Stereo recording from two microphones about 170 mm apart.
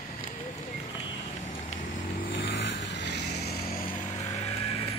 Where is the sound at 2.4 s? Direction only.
90° left.